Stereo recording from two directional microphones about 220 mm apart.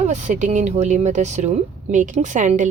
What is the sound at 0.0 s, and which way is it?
Speech, 35° right (ahead or behind).